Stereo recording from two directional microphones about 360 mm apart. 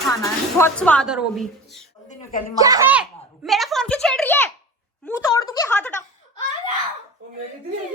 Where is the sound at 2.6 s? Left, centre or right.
Centre.